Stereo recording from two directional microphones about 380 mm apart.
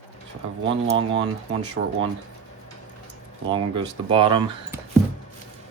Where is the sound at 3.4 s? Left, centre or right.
Centre.